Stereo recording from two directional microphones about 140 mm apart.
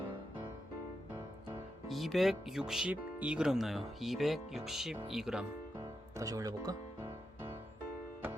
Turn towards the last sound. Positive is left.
turn(degrees=-25)  # may be behind; listen again after turning